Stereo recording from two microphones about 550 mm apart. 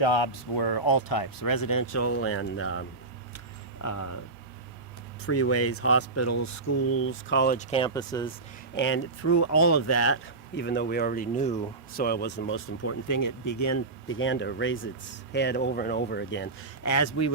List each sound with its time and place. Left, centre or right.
0.0 s speech: left
5.2 s speech: left; by 8.3 s centre
8.7 s speech: left
16.8 s speech: left